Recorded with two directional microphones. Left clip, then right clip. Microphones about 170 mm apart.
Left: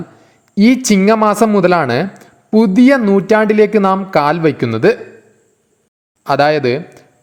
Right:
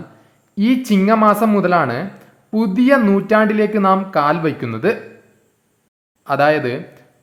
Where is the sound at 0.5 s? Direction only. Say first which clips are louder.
Left 5 dB; 35° left (ahead or behind).